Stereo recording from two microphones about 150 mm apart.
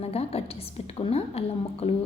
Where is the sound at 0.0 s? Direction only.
40° left (ahead or behind).